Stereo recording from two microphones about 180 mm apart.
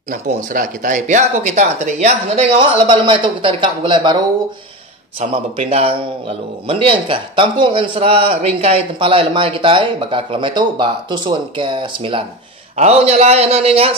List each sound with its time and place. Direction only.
0.1 s speech: 45° right (ahead or behind); by 4.2 s 25° right (ahead or behind)
5.2 s a man's voice: 35° right (ahead or behind)